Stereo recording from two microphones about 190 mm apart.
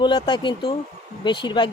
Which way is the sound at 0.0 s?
25° left (ahead or behind).